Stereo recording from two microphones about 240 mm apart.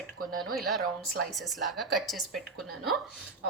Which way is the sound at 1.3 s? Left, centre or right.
Centre.